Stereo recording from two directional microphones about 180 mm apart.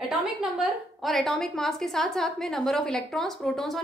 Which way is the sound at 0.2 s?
Centre (ahead or behind).